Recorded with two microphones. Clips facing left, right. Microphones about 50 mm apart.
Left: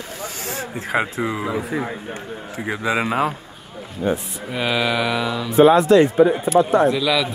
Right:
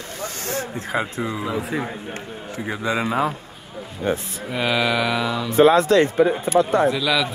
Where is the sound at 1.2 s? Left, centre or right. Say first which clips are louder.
Left 2 dB; left.